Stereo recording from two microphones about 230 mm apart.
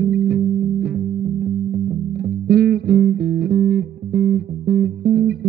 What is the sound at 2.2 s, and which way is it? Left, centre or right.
Music, right.